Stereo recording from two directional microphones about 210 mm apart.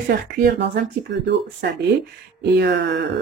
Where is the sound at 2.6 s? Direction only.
55° right (ahead or behind).